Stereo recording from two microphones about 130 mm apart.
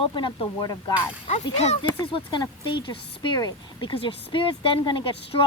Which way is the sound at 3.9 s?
45° left (ahead or behind).